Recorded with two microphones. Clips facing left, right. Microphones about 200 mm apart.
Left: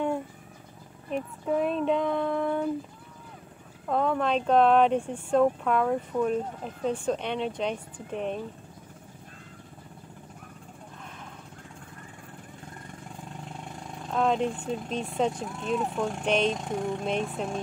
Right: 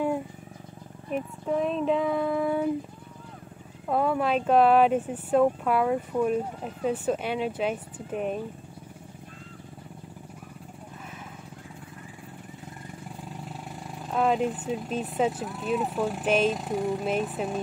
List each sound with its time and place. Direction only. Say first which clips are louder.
1.1 s speech: even; centre (ahead or behind)
3.8 s speech: right 1 dB; 5° right (ahead or behind)
13.2 s speech: even; 5° right (ahead or behind)